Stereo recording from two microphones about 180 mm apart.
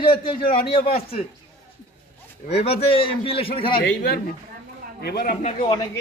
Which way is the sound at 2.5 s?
35° left (ahead or behind).